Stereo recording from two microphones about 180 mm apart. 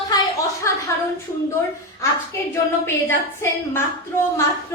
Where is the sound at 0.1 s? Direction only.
15° left (ahead or behind).